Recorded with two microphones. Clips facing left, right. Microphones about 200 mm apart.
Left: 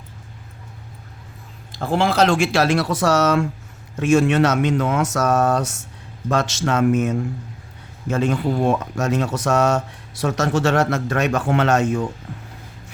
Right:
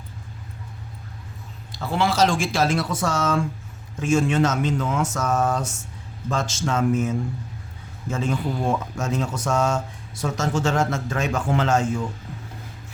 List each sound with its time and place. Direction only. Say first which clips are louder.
1.8 s speech: left 3 dB; 50° left (ahead or behind); by 12.0 s 70° left (ahead or behind)